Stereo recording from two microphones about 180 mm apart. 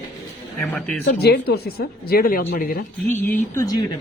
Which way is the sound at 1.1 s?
65° left (ahead or behind).